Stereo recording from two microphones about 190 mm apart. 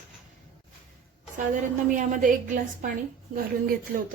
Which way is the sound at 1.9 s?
45° right (ahead or behind).